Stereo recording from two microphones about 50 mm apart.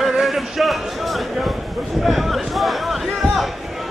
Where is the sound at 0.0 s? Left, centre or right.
Centre.